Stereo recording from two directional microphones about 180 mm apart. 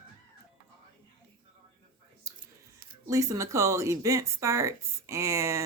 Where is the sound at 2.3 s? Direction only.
15° right (ahead or behind).